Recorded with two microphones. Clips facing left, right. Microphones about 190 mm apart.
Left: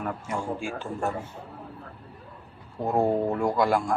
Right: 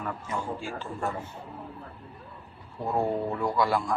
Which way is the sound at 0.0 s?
40° left (ahead or behind).